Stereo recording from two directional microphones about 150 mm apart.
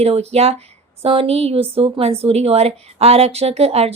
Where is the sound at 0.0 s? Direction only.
45° right (ahead or behind).